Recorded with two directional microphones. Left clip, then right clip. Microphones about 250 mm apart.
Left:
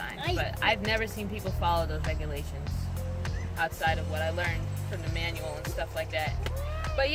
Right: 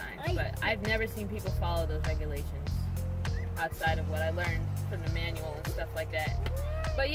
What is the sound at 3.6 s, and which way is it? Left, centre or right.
Music, centre.